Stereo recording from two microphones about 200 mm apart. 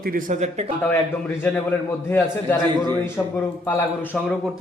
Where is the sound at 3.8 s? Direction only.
10° left (ahead or behind).